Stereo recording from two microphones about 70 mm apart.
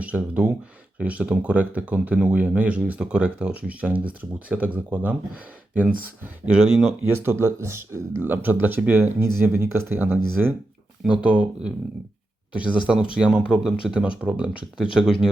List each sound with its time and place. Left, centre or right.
0.0 s speech: centre
6.4 s speech: centre
7.2 s speech: right
8.2 s speech: right
10.4 s speech: centre